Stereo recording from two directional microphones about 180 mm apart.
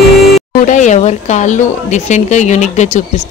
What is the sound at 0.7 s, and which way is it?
A woman's voice, 40° left (ahead or behind).